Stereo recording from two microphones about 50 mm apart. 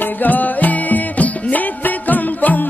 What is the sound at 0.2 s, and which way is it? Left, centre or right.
Music, left.